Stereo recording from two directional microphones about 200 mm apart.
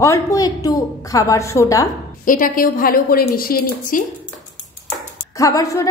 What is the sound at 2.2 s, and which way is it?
A woman's voice, 45° left (ahead or behind).